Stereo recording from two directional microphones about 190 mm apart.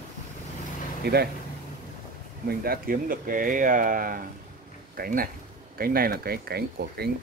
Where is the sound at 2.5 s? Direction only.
50° right (ahead or behind).